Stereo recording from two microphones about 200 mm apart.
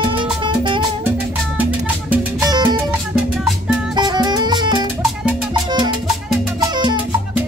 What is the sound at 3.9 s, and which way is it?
Music, 20° right (ahead or behind).